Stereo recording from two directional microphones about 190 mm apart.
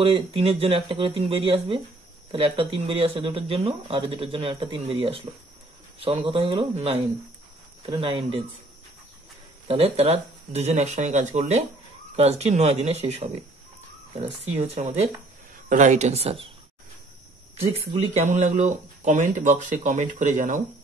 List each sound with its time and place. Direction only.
0.0 s speech: 30° right (ahead or behind)
8.0 s speech: 25° right (ahead or behind)
9.7 s speech: 30° right (ahead or behind)
17.6 s speech: 30° right (ahead or behind)
18.2 s speech: 40° right (ahead or behind)